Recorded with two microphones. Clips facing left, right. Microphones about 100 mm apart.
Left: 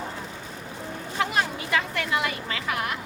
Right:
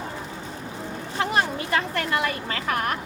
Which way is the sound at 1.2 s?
40° right (ahead or behind).